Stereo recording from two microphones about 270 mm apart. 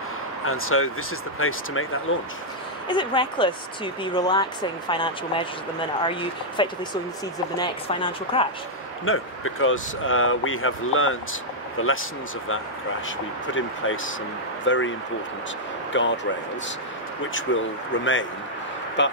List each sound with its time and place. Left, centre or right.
0.5 s speech: left
2.9 s speech: centre
9.0 s speech: left
13.5 s speech: left
15.9 s speech: left
17.5 s speech: left